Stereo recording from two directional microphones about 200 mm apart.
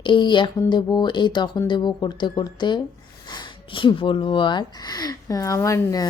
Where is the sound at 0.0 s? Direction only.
25° left (ahead or behind).